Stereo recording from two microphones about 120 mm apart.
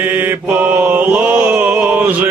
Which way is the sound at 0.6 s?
15° right (ahead or behind).